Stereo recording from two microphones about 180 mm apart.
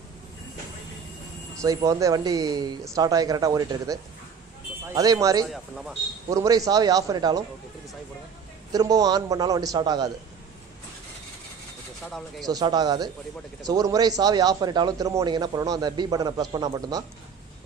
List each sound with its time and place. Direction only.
1.6 s speech: 20° right (ahead or behind)
5.5 s speech: centre (ahead or behind)
6.3 s speech: 20° right (ahead or behind)
8.7 s speech: 20° right (ahead or behind)
12.4 s speech: 20° right (ahead or behind)